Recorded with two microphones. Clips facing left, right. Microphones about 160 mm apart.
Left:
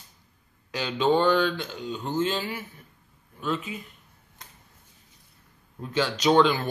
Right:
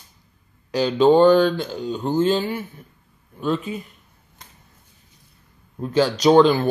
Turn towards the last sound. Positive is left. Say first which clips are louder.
# right 6 dB
turn(degrees=-40)  # may be behind; listen again after turning